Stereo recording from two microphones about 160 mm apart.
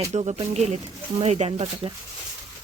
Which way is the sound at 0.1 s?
40° right (ahead or behind).